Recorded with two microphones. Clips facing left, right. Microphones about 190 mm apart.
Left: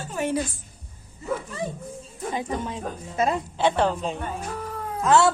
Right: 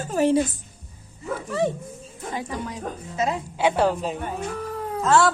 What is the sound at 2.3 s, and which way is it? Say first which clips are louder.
Speech: left 1 dB; 25° left (ahead or behind).